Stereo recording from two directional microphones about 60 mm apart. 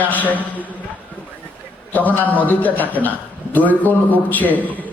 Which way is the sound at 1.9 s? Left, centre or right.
Left.